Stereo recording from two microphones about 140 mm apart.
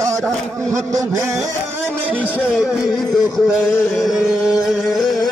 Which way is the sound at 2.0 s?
10° right (ahead or behind).